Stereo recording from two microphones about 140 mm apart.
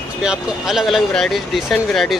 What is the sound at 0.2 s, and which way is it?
Speech, 5° right (ahead or behind).